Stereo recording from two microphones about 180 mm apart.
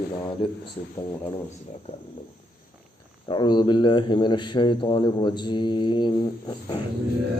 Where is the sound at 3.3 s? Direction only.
25° left (ahead or behind).